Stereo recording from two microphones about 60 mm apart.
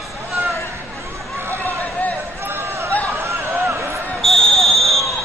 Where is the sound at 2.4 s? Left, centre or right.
Right.